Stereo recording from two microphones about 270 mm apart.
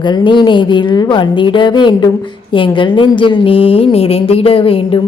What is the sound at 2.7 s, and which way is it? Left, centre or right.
A woman's voice, centre.